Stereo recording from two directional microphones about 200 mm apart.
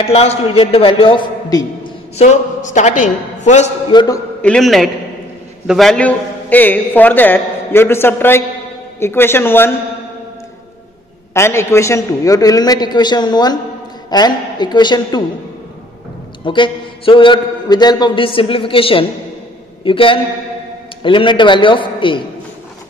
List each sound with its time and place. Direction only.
0.0 s a man's voice: 30° left (ahead or behind)
2.1 s a man's voice: 35° left (ahead or behind)
3.9 s a man's voice: 20° left (ahead or behind)
4.4 s a man's voice: 5° left (ahead or behind)
11.3 s a man's voice: 15° left (ahead or behind)
16.4 s a man's voice: 25° left (ahead or behind)